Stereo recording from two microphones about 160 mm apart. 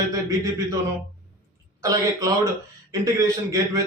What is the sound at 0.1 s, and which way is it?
Speech, 20° right (ahead or behind).